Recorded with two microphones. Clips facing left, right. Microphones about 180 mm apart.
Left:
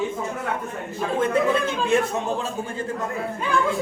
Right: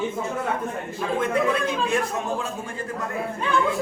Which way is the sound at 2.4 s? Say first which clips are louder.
Left 2 dB; 25° left (ahead or behind).